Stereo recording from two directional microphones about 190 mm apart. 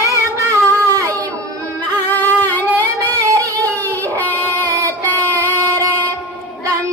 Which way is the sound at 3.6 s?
10° left (ahead or behind).